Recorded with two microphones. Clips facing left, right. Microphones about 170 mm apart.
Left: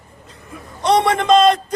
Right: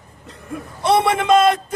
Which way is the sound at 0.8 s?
10° right (ahead or behind).